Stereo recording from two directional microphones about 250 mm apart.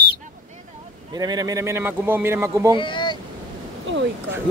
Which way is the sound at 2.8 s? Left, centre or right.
Centre.